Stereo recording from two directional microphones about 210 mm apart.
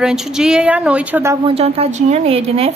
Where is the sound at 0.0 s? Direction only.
Centre (ahead or behind).